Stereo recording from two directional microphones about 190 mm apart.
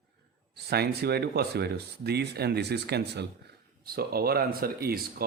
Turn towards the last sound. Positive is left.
turn(degrees=-55)  # may be behind; listen again after turning